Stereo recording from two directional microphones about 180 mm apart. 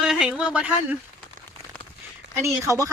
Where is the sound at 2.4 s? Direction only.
15° right (ahead or behind).